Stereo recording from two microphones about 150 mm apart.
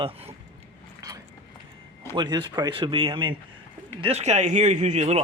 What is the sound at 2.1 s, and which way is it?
Speech, 30° right (ahead or behind).